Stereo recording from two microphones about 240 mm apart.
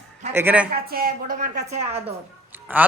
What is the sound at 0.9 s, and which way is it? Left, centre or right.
Speech, right.